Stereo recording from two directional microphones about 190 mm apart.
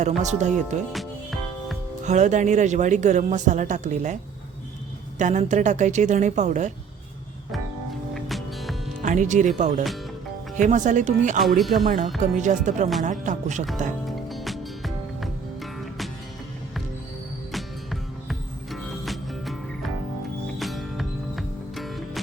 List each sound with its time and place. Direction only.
0.2 s a woman's voice: 40° right (ahead or behind)
0.9 s music: centre (ahead or behind)
2.0 s a woman's voice: 40° right (ahead or behind)
8.1 s music: centre (ahead or behind)
9.0 s a woman's voice: 40° right (ahead or behind)
11.4 s speech: centre (ahead or behind)
11.9 s a woman's voice: 40° right (ahead or behind)
14.3 s music: centre (ahead or behind)
18.3 s music: centre (ahead or behind)